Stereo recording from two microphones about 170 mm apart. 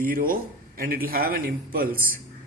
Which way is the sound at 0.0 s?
55° right (ahead or behind).